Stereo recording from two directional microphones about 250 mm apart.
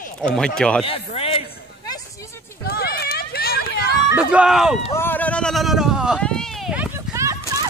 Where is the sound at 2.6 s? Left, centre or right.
Left.